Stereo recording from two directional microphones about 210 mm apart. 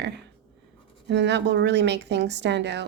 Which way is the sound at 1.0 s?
55° right (ahead or behind).